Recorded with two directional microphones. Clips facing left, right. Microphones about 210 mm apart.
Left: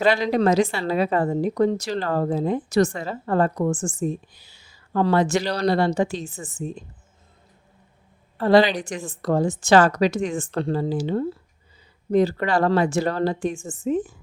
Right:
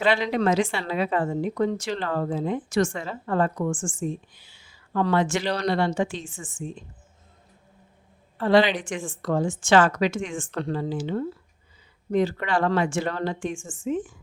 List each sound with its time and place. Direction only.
0.0 s a woman's voice: 40° left (ahead or behind)
8.4 s a woman's voice: 40° left (ahead or behind)